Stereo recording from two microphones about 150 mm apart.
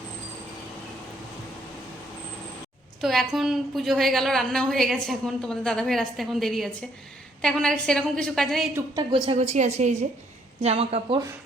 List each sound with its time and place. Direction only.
3.0 s a woman's voice: centre (ahead or behind)
9.1 s a woman's voice: 40° right (ahead or behind)
9.4 s a woman's voice: 50° right (ahead or behind)